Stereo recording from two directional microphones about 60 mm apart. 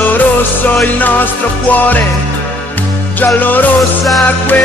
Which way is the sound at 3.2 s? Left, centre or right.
Left.